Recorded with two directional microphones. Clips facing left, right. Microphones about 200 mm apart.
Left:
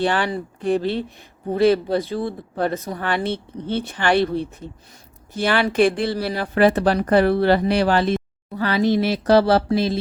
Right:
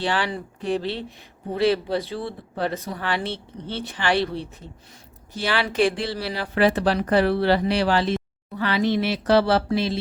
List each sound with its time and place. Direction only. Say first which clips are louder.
0.0 s speech: left 4 dB; 50° left (ahead or behind)